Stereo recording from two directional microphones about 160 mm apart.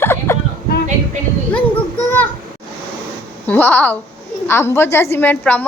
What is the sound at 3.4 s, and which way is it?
A woman's voice, 10° left (ahead or behind).